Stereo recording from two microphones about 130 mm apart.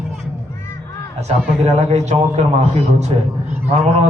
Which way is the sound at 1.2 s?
55° right (ahead or behind).